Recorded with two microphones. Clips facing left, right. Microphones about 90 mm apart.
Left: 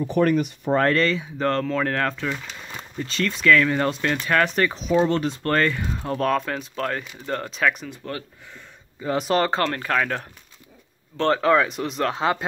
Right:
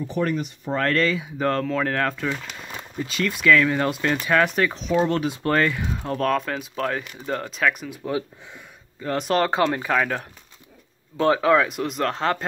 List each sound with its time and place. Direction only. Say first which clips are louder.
0.0 s speech: left 5 dB; 60° left (ahead or behind)
0.9 s speech: even; 5° right (ahead or behind)